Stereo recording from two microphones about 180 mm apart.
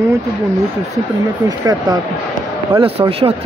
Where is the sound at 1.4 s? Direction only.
20° right (ahead or behind).